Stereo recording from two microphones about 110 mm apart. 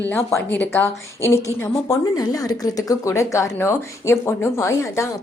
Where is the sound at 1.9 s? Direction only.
35° left (ahead or behind).